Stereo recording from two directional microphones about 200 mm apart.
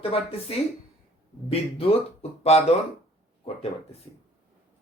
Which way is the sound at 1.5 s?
30° left (ahead or behind).